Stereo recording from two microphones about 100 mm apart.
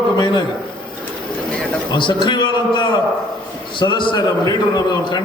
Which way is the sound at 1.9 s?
50° left (ahead or behind).